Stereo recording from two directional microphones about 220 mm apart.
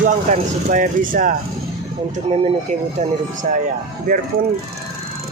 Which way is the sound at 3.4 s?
40° right (ahead or behind).